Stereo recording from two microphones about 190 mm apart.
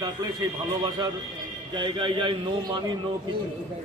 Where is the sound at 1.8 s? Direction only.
25° right (ahead or behind).